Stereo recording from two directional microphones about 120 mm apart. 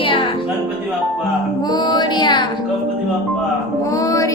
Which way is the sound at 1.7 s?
35° left (ahead or behind).